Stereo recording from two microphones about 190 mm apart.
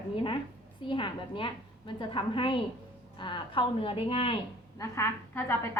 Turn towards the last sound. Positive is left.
turn(degrees=15)  # may be behind; listen again after turning